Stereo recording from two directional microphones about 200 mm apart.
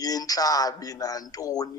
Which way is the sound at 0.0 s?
20° left (ahead or behind).